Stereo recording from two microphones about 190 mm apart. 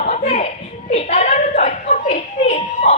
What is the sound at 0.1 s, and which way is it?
Children playing, 35° left (ahead or behind).